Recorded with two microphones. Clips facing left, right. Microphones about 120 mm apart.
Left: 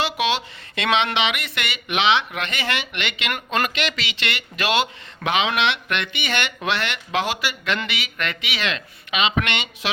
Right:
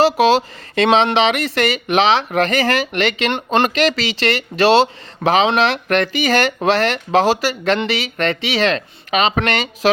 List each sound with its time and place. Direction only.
0.0 s speech: 40° right (ahead or behind)